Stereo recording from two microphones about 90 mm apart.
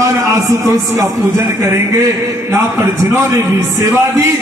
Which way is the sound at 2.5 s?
35° right (ahead or behind).